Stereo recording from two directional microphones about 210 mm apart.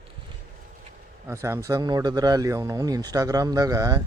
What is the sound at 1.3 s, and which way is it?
Speech, 15° right (ahead or behind).